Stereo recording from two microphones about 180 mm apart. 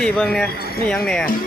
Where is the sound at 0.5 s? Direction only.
60° left (ahead or behind).